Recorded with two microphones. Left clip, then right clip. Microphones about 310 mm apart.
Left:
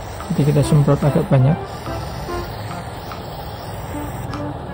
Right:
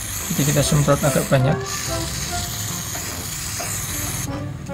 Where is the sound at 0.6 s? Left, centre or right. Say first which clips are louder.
Right 1 dB; left.